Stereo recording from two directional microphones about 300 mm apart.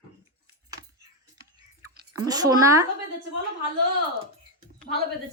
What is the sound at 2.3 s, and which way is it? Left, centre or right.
Speech, centre.